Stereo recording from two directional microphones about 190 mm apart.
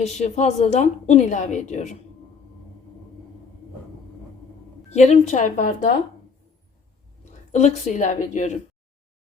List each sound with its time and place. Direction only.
0.0 s a woman's voice: 35° left (ahead or behind)
4.9 s a woman's voice: 35° left (ahead or behind)
7.5 s a woman's voice: 35° left (ahead or behind)